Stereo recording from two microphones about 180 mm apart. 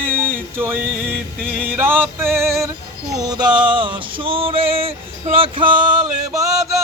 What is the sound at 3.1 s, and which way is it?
Music, 20° right (ahead or behind).